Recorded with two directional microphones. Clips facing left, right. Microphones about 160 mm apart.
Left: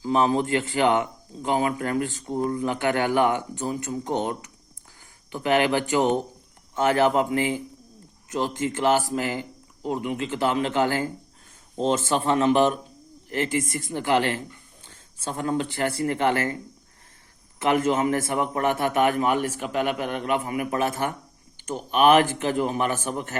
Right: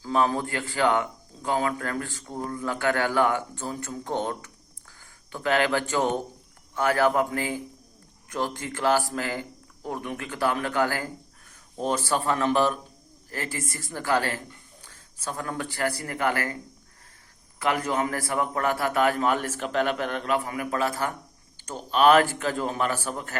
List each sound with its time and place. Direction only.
0.0 s a man's voice: 20° left (ahead or behind)
17.6 s a man's voice: 25° left (ahead or behind)